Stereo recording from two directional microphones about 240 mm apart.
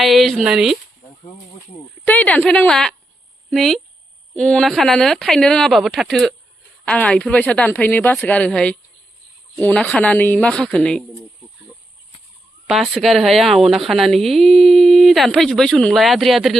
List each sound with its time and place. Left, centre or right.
0.0 s speech: centre
2.0 s a woman's voice: centre
12.6 s a woman's voice: centre